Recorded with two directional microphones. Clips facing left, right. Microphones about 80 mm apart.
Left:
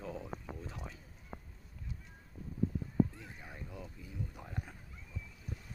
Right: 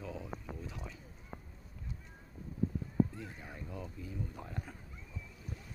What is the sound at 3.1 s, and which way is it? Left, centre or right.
Speech, centre.